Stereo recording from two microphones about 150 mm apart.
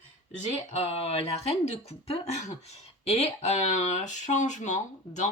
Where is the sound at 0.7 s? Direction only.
45° left (ahead or behind).